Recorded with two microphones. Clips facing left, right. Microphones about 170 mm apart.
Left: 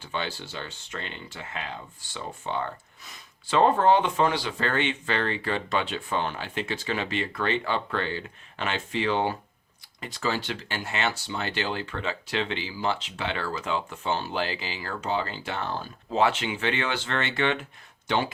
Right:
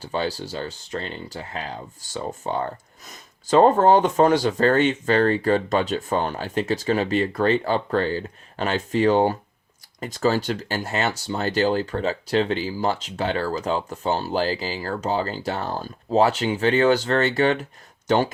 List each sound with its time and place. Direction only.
0.0 s speech: 40° right (ahead or behind)